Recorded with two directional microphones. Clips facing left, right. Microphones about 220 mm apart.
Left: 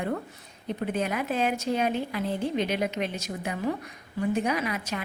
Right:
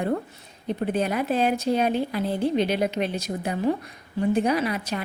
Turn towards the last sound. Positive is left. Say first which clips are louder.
# right 4 dB
turn(degrees=-35)  # may be behind; listen again after turning